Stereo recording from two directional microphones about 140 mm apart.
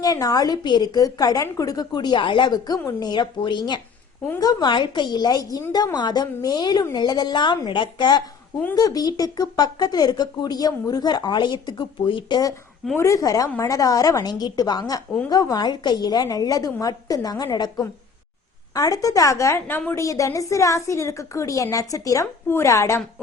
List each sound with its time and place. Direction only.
0.0 s a woman's voice: 25° left (ahead or behind)